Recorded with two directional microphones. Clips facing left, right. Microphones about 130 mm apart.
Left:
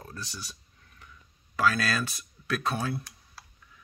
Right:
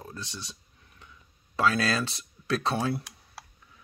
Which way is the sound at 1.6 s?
25° right (ahead or behind).